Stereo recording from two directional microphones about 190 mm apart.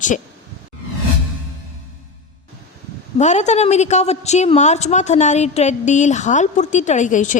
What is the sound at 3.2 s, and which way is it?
A woman's voice, 35° left (ahead or behind).